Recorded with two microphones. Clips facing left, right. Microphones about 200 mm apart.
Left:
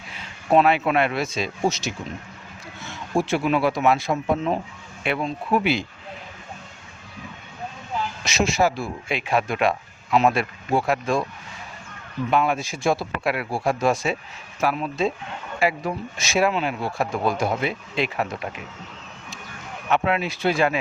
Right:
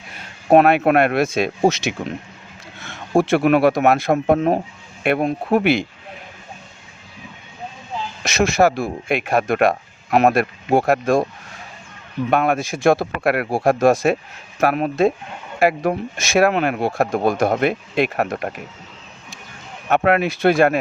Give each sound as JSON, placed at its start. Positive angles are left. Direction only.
{"t": 0.2, "sound": "speech", "side_deg": -55}
{"t": 3.2, "sound": "speech", "side_deg": -65}
{"t": 8.2, "sound": "speech", "side_deg": -55}
{"t": 12.3, "sound": "speech", "side_deg": -55}
{"t": 14.6, "sound": "speech", "side_deg": -60}
{"t": 19.9, "sound": "speech", "side_deg": -60}